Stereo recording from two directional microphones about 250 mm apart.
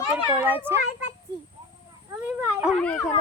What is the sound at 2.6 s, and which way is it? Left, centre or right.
Speech, centre.